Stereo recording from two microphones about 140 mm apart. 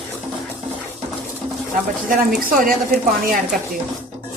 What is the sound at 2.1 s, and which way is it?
Speech, 85° right.